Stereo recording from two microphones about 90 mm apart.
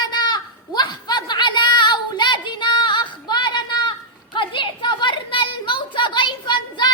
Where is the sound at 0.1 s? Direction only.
50° left (ahead or behind).